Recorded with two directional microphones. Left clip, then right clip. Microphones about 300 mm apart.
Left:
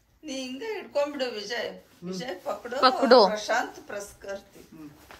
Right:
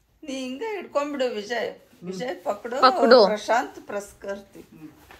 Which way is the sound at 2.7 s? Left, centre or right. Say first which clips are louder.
Right 3 dB; centre.